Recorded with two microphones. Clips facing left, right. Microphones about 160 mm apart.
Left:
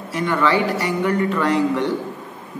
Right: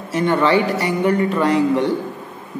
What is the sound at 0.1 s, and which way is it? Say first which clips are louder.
Speech: right 3 dB; 25° right (ahead or behind).